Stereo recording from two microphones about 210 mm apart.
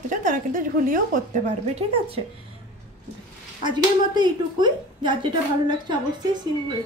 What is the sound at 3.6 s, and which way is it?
A woman's voice, 20° right (ahead or behind).